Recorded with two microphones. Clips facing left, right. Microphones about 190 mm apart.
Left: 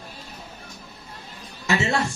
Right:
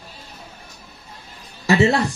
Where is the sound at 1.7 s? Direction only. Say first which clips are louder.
Right 7 dB; 35° right (ahead or behind).